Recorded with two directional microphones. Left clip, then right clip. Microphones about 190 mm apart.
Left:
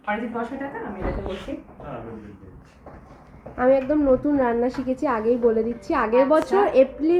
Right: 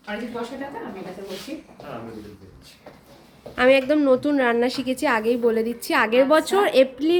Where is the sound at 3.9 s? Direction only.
25° right (ahead or behind).